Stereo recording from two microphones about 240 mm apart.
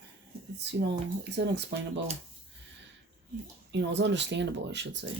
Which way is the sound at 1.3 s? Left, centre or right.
Right.